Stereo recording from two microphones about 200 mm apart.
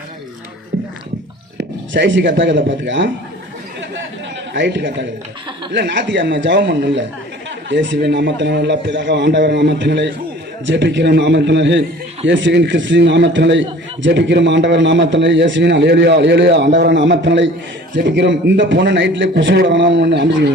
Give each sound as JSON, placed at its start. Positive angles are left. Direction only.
{"t": 1.5, "sound": "speech", "side_deg": -60}
{"t": 4.5, "sound": "a man's voice", "side_deg": -60}